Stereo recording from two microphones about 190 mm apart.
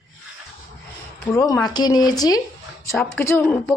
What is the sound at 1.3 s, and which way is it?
A woman's voice, 20° left (ahead or behind).